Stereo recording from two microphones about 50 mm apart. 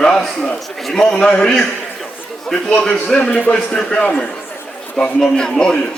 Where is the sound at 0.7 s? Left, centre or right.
Centre.